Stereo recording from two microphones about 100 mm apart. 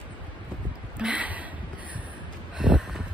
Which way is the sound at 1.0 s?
15° right (ahead or behind).